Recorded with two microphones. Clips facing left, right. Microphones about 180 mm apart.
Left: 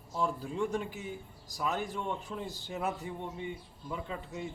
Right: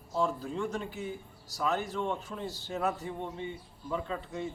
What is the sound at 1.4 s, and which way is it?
A man's voice, 15° left (ahead or behind).